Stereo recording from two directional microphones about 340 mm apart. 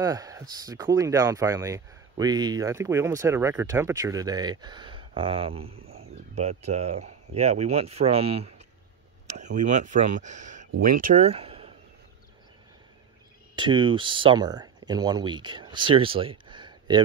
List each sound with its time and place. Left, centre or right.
0.0 s speech: centre
13.6 s speech: centre